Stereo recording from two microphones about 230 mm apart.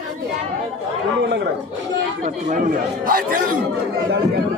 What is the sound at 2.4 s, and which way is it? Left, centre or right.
Speech, right.